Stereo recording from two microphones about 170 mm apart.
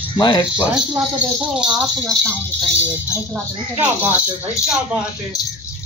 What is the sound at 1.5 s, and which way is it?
Speech, centre (ahead or behind).